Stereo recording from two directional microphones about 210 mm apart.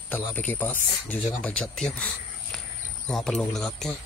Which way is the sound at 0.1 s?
10° left (ahead or behind).